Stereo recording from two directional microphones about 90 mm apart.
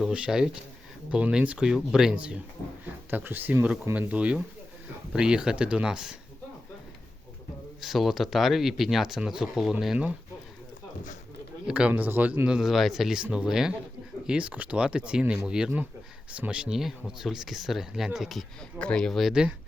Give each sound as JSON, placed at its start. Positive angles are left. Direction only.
{"t": 0.0, "sound": "speech", "side_deg": -10}
{"t": 7.8, "sound": "speech", "side_deg": 0}
{"t": 11.6, "sound": "speech", "side_deg": -10}
{"t": 12.5, "sound": "speech", "side_deg": 0}
{"t": 18.8, "sound": "speech", "side_deg": 10}
{"t": 19.3, "sound": "speech", "side_deg": -10}